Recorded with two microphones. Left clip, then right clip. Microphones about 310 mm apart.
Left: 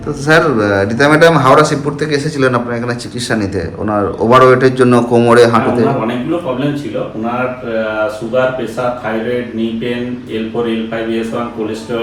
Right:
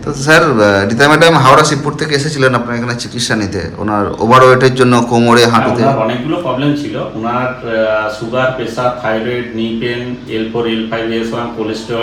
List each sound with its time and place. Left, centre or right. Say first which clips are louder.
0.3 s a man's voice: right 3 dB; centre
3.8 s a man's voice: right 1 dB; centre